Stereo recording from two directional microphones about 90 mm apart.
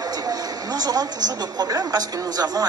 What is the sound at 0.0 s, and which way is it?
A woman's voice, 45° right (ahead or behind).